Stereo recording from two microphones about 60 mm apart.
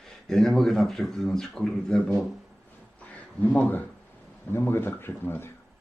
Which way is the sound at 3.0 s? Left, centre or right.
Left.